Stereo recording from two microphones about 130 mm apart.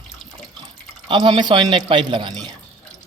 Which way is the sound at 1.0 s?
40° right (ahead or behind).